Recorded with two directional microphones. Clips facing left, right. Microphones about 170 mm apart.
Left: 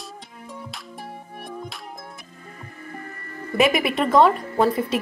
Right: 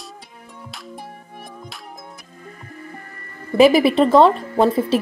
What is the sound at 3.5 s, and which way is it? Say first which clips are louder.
Speech: right 7 dB; 30° right (ahead or behind).